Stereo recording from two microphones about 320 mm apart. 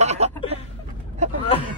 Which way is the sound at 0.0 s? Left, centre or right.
Right.